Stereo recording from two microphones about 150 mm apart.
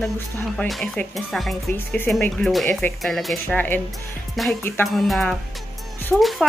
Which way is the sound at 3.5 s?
10° left (ahead or behind).